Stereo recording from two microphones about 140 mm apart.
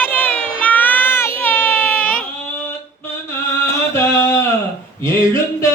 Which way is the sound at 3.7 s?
20° left (ahead or behind).